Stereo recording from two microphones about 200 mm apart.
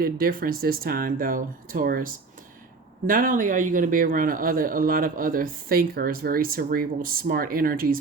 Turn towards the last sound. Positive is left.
turn(degrees=-45)  # may be behind; listen again after turning